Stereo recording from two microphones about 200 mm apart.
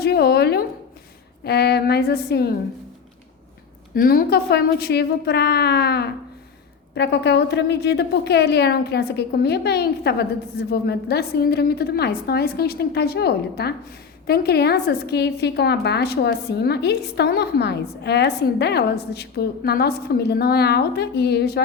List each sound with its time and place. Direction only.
0.0 s a sound: 55° left (ahead or behind)
1.5 s a woman's voice: 55° left (ahead or behind)
3.9 s a woman's voice: 45° left (ahead or behind)